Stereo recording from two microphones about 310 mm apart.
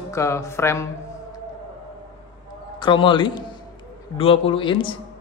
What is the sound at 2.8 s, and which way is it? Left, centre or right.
A man's voice, centre.